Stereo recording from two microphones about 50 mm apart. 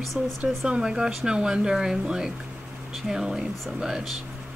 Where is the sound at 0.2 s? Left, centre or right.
Right; by 4.1 s centre.